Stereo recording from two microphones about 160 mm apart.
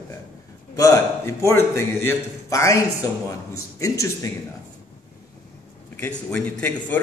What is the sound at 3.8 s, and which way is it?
Speech, 20° left (ahead or behind).